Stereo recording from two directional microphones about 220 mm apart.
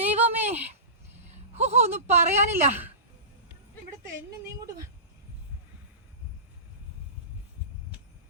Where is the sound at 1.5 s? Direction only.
30° right (ahead or behind).